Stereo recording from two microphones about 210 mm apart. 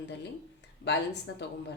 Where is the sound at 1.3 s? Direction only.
70° left (ahead or behind).